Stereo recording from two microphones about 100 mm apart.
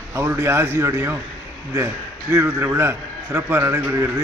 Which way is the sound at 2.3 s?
25° right (ahead or behind).